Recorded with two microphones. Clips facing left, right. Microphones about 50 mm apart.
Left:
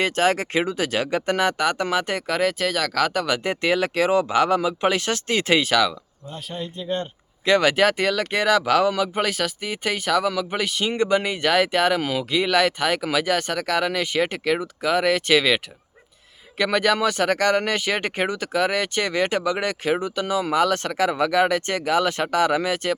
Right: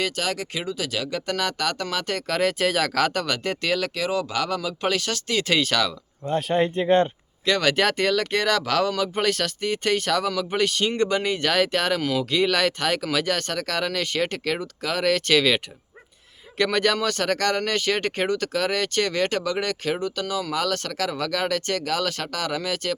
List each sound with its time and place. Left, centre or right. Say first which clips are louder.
0.0 s speech: left 6 dB; left
5.6 s speech: left 4 dB; centre
6.2 s speech: right 11 dB; right
7.4 s speech: left 3 dB; centre